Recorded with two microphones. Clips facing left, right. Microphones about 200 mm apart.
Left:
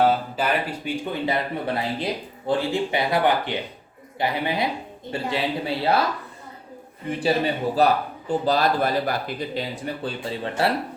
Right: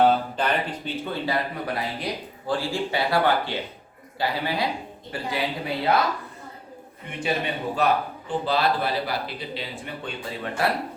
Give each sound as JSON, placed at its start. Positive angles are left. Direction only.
{"t": 0.0, "sound": "speech", "side_deg": 5}
{"t": 7.2, "sound": "speech", "side_deg": 35}